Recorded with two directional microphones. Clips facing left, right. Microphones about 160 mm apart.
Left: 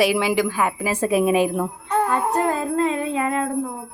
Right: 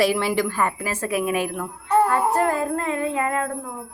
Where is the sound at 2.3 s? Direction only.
20° left (ahead or behind).